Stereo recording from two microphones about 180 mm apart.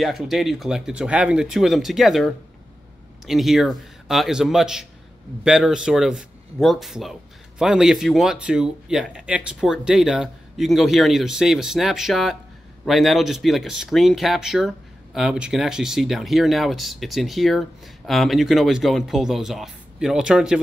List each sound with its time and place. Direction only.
0.0 s a man's voice: centre (ahead or behind)